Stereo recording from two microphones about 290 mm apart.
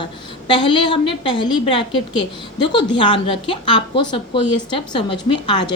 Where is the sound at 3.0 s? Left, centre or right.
Centre.